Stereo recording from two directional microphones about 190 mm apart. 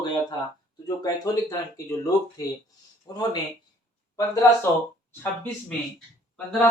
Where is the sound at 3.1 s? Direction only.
20° left (ahead or behind).